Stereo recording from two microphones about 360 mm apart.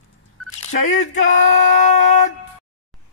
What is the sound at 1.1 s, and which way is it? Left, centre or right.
Female singing, left.